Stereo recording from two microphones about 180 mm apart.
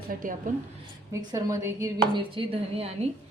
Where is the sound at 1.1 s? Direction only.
20° right (ahead or behind).